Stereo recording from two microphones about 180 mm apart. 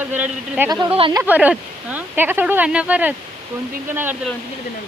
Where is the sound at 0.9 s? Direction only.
30° right (ahead or behind).